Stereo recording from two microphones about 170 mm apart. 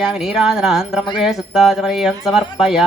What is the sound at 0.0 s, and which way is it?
Speech, centre (ahead or behind).